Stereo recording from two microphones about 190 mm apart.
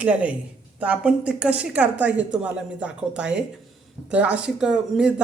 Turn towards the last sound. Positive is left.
turn(degrees=-5)  # may be behind; listen again after turning